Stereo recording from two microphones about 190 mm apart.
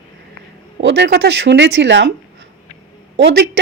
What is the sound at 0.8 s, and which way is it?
Speech, 65° right (ahead or behind).